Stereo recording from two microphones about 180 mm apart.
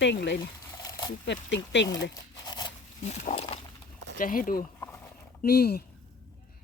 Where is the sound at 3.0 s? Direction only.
40° left (ahead or behind).